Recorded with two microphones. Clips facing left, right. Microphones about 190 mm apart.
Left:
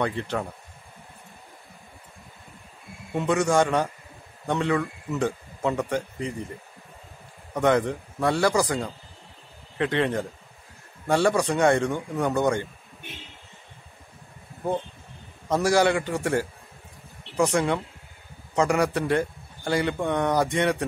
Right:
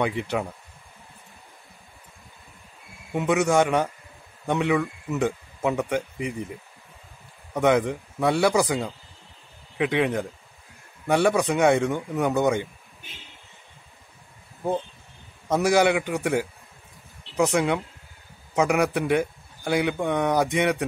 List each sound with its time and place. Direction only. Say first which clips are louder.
0.0 s a man's voice: right 2 dB; 10° right (ahead or behind)
3.1 s a man's voice: right 1 dB; 10° right (ahead or behind)
7.5 s a man's voice: right 1 dB; 10° right (ahead or behind)
9.8 s a man's voice: right 1 dB; 10° right (ahead or behind)
15.4 s a man's voice: right 1 dB; 15° right (ahead or behind)